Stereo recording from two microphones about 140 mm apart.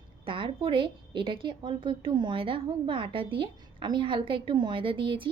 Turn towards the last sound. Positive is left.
turn(degrees=-40)  # may be behind; listen again after turning